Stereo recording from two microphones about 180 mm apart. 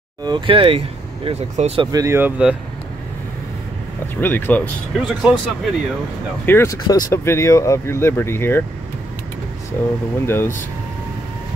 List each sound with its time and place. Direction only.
0.2 s speech: 25° right (ahead or behind); by 2.5 s 10° right (ahead or behind)
4.2 s speech: 10° left (ahead or behind)
4.9 s speech: centre (ahead or behind)
6.4 s speech: 15° left (ahead or behind)
9.8 s speech: 10° left (ahead or behind)